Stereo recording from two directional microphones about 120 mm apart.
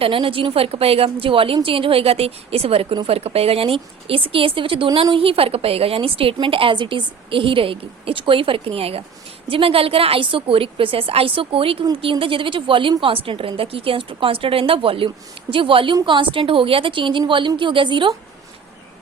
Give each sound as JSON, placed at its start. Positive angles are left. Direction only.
{"t": 0.0, "sound": "a woman's voice", "side_deg": -50}